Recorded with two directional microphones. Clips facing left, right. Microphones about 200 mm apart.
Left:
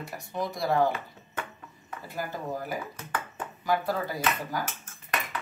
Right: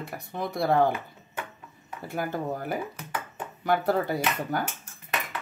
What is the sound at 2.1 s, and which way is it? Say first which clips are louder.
Speech: right 4 dB; 60° right (ahead or behind).